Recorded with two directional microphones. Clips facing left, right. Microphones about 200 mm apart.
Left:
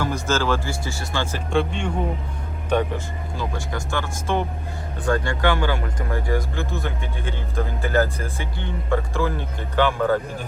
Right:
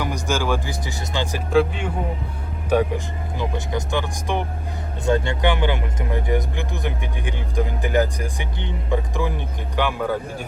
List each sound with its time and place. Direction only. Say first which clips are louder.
0.0 s speech: left 1 dB; 15° right (ahead or behind)
1.5 s speech: right 5 dB; 5° right (ahead or behind)
3.3 s speech: right 3 dB; 20° right (ahead or behind)